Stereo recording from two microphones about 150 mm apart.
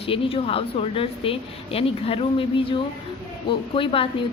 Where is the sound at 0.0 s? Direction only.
40° left (ahead or behind).